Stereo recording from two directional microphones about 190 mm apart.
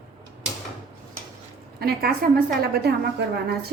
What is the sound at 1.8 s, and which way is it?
A woman's voice, 55° right (ahead or behind).